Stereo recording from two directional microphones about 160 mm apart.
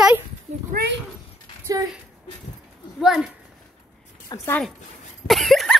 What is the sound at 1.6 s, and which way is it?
Speech, 20° right (ahead or behind).